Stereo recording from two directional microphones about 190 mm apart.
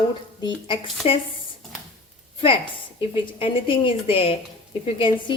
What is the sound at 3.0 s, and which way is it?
A woman's voice, 30° left (ahead or behind).